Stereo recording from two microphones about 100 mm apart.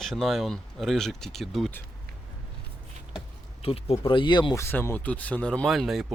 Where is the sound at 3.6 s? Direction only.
70° left (ahead or behind); by 4.5 s 50° left (ahead or behind).